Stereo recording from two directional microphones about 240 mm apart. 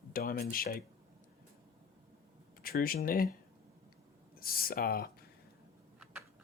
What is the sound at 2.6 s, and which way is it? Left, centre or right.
Speech, left.